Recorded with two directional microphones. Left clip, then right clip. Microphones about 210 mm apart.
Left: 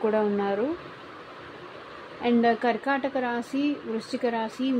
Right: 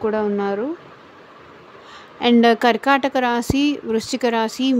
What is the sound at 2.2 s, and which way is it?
A woman's voice, 35° right (ahead or behind).